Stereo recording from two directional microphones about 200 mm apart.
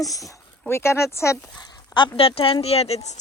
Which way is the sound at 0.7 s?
15° left (ahead or behind).